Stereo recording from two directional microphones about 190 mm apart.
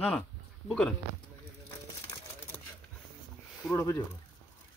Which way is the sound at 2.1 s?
15° left (ahead or behind).